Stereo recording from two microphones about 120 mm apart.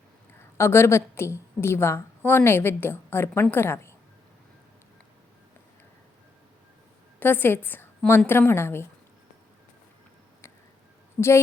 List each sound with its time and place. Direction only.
0.5 s a woman's voice: 20° left (ahead or behind)
7.2 s a woman's voice: 15° left (ahead or behind)
11.2 s a woman's voice: 5° left (ahead or behind)